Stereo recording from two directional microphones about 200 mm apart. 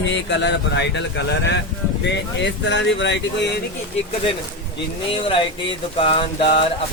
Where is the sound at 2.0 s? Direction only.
60° left (ahead or behind).